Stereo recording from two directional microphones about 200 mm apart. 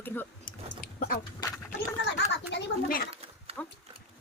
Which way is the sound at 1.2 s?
20° left (ahead or behind).